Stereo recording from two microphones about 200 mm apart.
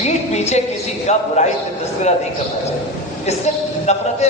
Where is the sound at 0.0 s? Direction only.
35° left (ahead or behind).